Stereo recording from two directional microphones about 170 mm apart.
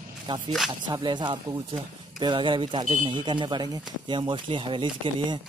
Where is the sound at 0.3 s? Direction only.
30° right (ahead or behind).